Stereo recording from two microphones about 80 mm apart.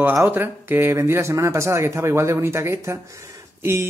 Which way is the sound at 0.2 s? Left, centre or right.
Right.